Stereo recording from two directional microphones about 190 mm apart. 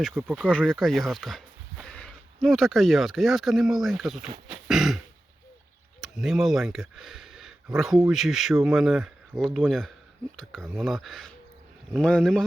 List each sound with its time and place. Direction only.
0.2 s speech: centre (ahead or behind)
4.5 s a sound: centre (ahead or behind)
6.0 s speech: centre (ahead or behind)